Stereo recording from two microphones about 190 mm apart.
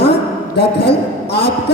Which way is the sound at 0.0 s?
60° left (ahead or behind).